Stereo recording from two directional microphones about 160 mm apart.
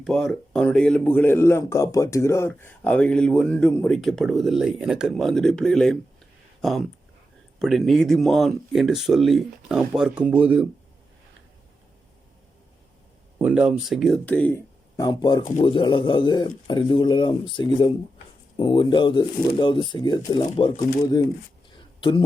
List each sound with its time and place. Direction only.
0.0 s speech: centre (ahead or behind)
13.4 s speech: 5° right (ahead or behind); by 14.6 s 10° left (ahead or behind)
14.9 s a man's voice: 25° left (ahead or behind)